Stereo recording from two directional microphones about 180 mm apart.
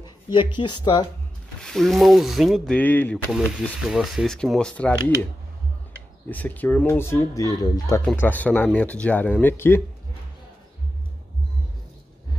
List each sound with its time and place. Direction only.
0.0 s speech: 25° left (ahead or behind)
1.6 s speech: centre (ahead or behind)
3.3 s speech: 5° right (ahead or behind)
6.2 s speech: 10° left (ahead or behind)
8.0 s speech: 10° left (ahead or behind)